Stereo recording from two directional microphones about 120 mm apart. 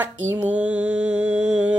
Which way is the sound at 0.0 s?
15° right (ahead or behind).